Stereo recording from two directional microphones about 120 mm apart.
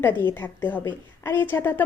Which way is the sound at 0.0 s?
15° left (ahead or behind).